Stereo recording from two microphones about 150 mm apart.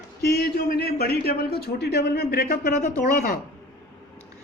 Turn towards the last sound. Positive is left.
turn(degrees=75)  # may be behind; listen again after turning